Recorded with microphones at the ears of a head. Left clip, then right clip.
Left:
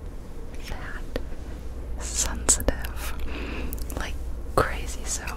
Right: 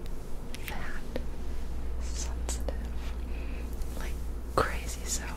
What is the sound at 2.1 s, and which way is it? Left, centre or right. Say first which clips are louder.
Whispering: left 15 dB; left.